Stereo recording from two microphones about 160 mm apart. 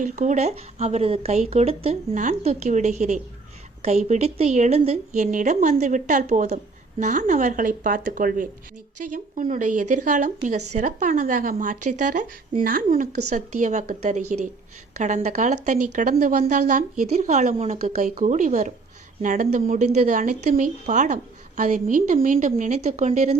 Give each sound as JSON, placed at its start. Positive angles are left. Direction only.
{"t": 0.0, "sound": "speech", "side_deg": -45}